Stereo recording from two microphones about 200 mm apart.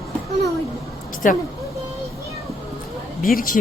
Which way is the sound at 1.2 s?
40° left (ahead or behind).